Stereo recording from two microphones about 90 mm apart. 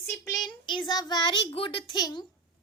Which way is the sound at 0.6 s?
60° left (ahead or behind).